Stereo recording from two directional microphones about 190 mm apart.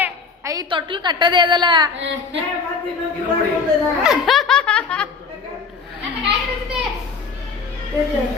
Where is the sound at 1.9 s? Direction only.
70° right (ahead or behind).